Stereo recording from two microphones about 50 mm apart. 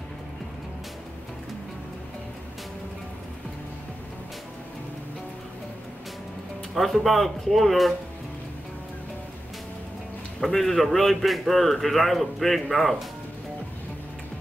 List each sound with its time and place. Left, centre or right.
6.7 s a man's voice: centre
10.4 s a man's voice: centre